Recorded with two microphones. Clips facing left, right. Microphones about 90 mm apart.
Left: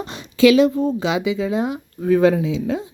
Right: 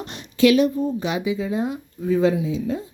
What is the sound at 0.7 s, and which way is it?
A woman's voice, 90° left.